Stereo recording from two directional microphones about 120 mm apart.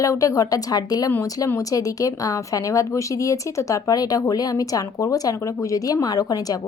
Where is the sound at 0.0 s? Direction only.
25° left (ahead or behind).